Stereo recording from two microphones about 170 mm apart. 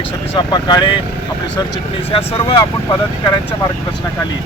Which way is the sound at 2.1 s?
35° left (ahead or behind).